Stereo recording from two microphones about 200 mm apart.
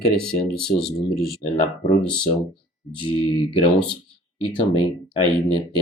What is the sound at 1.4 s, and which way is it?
Speech, 35° left (ahead or behind).